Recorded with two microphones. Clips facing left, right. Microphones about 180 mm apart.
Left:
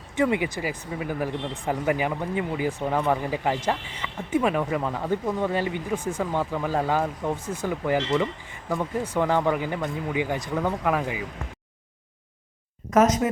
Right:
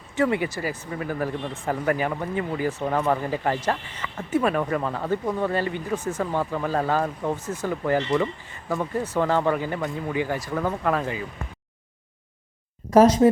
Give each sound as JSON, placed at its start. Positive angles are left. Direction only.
{"t": 0.2, "sound": "speech", "side_deg": 15}
{"t": 9.0, "sound": "speech", "side_deg": 15}
{"t": 12.9, "sound": "speech", "side_deg": -30}